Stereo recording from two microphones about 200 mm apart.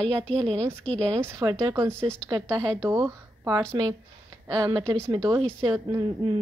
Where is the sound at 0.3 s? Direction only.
30° right (ahead or behind).